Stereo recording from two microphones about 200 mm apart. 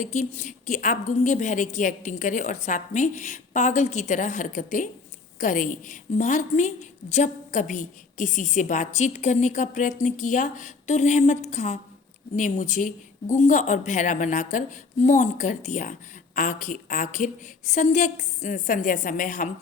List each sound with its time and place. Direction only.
0.0 s a woman's voice: 35° left (ahead or behind)